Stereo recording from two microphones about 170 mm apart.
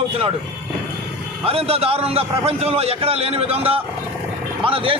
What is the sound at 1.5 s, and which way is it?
Speech, 35° right (ahead or behind).